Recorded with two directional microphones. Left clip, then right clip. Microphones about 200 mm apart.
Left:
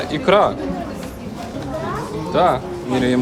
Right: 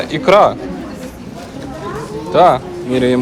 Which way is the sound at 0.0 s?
5° left (ahead or behind).